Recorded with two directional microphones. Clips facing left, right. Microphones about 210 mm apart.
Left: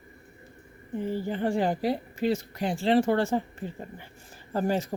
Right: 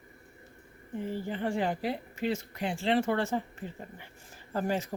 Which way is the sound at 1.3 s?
40° left (ahead or behind).